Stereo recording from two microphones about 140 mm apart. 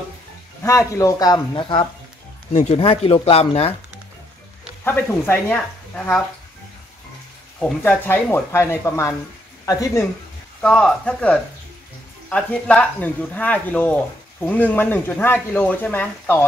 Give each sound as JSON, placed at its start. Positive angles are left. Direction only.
{"t": 0.7, "sound": "speech", "side_deg": 25}
{"t": 2.5, "sound": "speech", "side_deg": 50}
{"t": 4.8, "sound": "speech", "side_deg": 15}
{"t": 7.6, "sound": "speech", "side_deg": 15}
{"t": 10.6, "sound": "speech", "side_deg": 5}